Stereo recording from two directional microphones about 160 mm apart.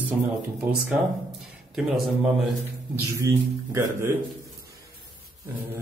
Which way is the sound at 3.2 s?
20° right (ahead or behind).